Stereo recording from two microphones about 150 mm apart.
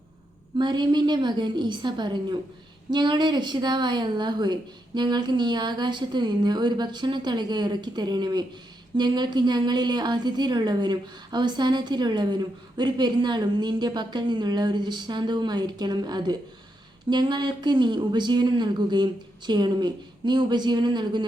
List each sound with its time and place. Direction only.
0.6 s a woman's voice: 30° right (ahead or behind)